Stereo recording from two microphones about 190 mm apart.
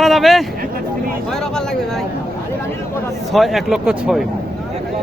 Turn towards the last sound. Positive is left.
turn(degrees=0)  # may be behind; listen again after turning